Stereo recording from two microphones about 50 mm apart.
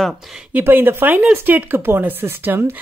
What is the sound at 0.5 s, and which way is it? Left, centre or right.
Speech, right.